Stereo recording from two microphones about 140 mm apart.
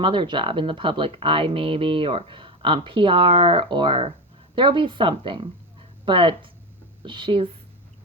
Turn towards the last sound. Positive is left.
turn(degrees=-40)  # may be behind; listen again after turning